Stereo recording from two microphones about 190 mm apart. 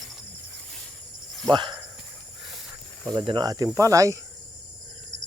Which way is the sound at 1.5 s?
25° right (ahead or behind).